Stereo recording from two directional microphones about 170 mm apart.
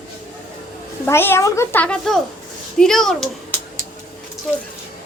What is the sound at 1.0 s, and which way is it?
A child's voice, 15° left (ahead or behind).